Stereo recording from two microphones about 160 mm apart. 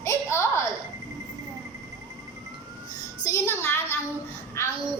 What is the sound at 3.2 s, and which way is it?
Speech, 15° left (ahead or behind).